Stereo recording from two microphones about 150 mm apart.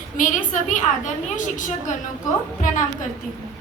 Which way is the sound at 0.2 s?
60° left (ahead or behind).